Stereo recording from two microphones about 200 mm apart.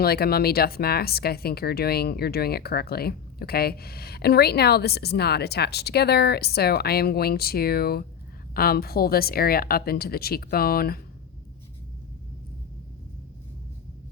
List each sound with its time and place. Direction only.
0.0 s speech: 50° left (ahead or behind)